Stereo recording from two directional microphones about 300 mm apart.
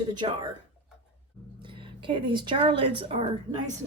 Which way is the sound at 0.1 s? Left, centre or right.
Centre.